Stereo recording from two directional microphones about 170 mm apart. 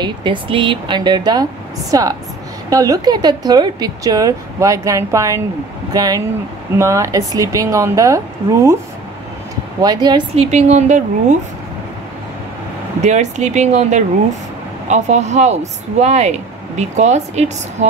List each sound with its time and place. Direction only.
0.0 s speech: 30° right (ahead or behind)
9.8 s speech: 25° right (ahead or behind)
10.3 s speech: 40° right (ahead or behind)
13.0 s speech: 40° right (ahead or behind)